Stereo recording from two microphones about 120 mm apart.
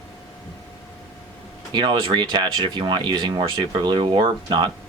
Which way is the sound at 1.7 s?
40° right (ahead or behind).